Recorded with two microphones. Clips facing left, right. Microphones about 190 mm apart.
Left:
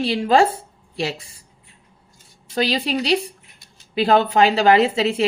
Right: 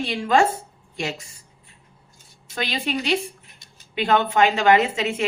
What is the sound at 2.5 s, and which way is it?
A woman's voice, 35° left (ahead or behind).